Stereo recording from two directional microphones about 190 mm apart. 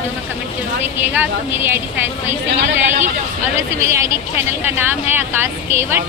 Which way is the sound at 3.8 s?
15° right (ahead or behind).